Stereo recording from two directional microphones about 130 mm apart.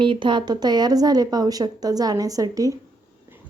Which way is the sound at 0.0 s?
40° right (ahead or behind).